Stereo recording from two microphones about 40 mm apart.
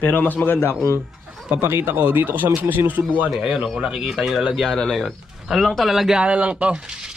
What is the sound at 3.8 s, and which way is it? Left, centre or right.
Speech, centre.